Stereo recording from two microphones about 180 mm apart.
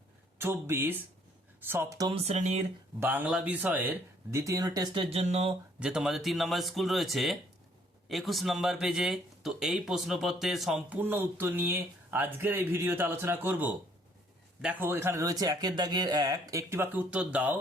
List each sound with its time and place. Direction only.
0.3 s speech: 15° right (ahead or behind)
2.1 s speech: 35° right (ahead or behind)
3.0 s speech: 10° right (ahead or behind); by 5.5 s 35° right (ahead or behind)
5.8 s speech: 5° right (ahead or behind)